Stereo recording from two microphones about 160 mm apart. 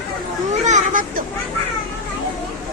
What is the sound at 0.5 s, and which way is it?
Children playing, 50° right (ahead or behind).